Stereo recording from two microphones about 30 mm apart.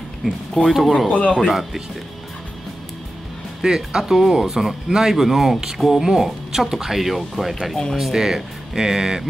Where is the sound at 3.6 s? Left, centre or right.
Centre.